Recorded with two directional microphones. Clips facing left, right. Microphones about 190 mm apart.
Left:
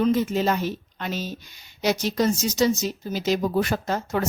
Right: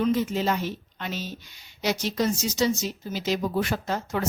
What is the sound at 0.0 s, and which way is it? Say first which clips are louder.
A woman's voice: left 3 dB; 45° left (ahead or behind).